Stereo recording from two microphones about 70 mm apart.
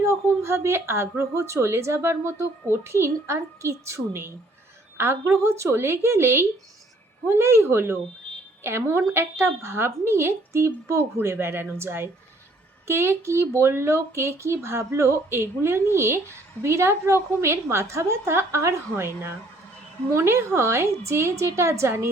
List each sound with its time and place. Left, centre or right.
0.0 s a woman's voice: right